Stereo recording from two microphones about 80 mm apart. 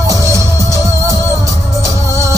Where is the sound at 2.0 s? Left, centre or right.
Left.